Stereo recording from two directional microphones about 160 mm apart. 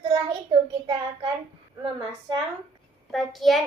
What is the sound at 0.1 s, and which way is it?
Child singing, 30° right (ahead or behind).